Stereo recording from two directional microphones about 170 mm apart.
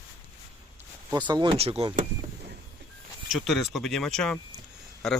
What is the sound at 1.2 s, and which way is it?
Speech, 25° right (ahead or behind).